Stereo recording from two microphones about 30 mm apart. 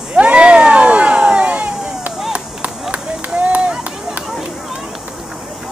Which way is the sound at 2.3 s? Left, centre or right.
Right.